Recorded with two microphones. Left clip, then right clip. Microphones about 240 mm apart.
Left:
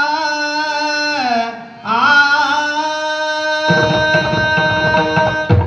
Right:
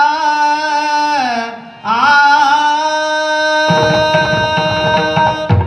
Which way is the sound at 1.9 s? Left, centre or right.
Right.